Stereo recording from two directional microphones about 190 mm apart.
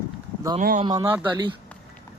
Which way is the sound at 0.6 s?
45° right (ahead or behind).